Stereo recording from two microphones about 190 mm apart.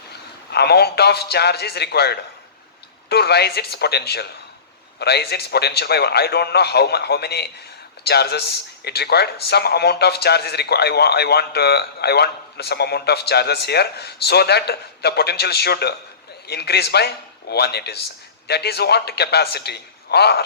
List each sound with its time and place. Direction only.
0.5 s a man's voice: 60° left (ahead or behind)